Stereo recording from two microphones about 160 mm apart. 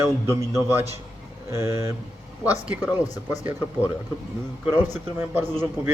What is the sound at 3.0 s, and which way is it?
Speech, 20° left (ahead or behind).